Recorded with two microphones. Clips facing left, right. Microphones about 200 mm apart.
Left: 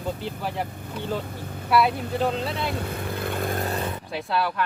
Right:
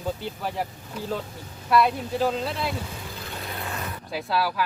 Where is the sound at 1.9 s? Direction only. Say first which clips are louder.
Left 1 dB; 60° left (ahead or behind).